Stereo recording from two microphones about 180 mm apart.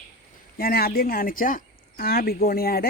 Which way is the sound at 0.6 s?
55° left (ahead or behind).